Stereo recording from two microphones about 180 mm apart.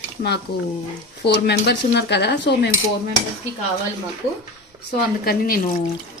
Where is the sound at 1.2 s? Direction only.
65° left (ahead or behind).